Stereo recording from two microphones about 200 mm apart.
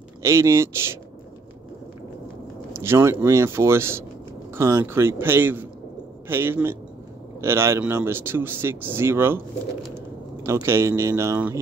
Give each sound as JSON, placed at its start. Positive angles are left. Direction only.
{"t": 0.2, "sound": "speech", "side_deg": -15}
{"t": 2.7, "sound": "speech", "side_deg": -10}